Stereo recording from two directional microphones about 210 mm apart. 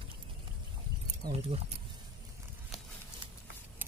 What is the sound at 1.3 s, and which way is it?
Speech, 30° right (ahead or behind).